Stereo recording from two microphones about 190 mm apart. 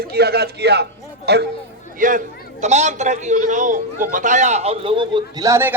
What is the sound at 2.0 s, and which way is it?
A man's voice, 45° right (ahead or behind).